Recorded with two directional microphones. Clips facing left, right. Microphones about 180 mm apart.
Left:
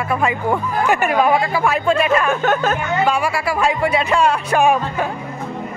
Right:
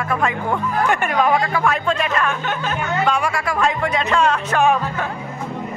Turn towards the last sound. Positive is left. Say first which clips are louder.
# left 2 dB
turn(degrees=10)  # may be behind; listen again after turning